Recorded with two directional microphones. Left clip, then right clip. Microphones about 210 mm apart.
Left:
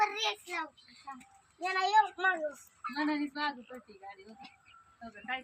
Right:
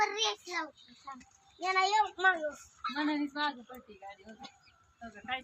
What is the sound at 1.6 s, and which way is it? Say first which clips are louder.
A child's voice: left 1 dB; 15° left (ahead or behind).